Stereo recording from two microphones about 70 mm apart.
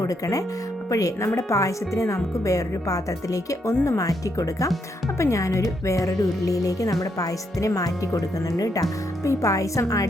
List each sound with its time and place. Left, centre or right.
0.0 s speech: left
5.1 s speech: left